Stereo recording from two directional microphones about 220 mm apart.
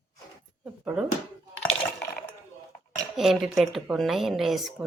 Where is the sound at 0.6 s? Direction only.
5° right (ahead or behind).